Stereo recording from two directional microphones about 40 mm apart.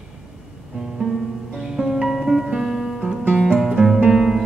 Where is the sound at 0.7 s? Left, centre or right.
Right.